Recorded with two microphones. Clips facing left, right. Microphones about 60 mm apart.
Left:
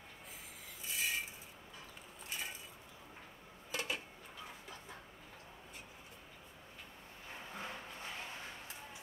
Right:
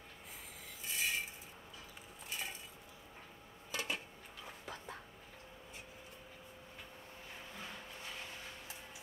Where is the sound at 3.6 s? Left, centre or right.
Centre.